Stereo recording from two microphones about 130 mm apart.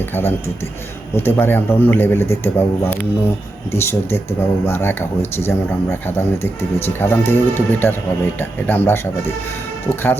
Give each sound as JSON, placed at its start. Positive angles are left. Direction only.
{"t": 0.1, "sound": "a man's voice", "side_deg": 20}